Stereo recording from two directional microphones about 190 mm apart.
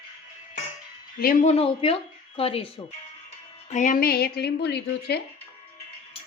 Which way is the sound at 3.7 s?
40° left (ahead or behind).